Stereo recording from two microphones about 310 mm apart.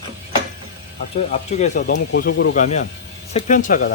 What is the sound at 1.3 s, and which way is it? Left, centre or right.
Speech, left.